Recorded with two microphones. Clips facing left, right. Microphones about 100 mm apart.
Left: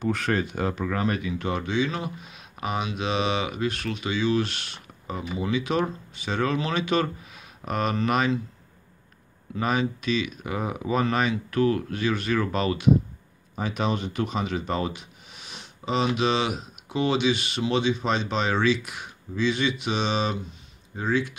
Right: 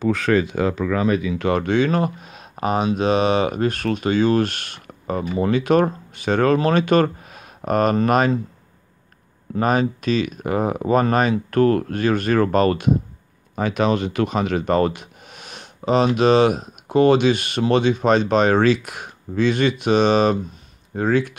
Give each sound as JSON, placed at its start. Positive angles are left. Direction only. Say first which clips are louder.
{"t": 0.3, "sound": "speech", "louder": "right 10 dB", "side_deg": -90}
{"t": 1.4, "sound": "speech", "louder": "right 7 dB", "side_deg": -65}
{"t": 9.6, "sound": "speech", "louder": "right 6 dB", "side_deg": -45}
{"t": 13.6, "sound": "speech", "louder": "right 7 dB", "side_deg": -80}